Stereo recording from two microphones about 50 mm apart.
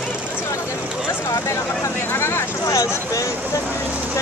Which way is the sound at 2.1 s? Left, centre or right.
Left.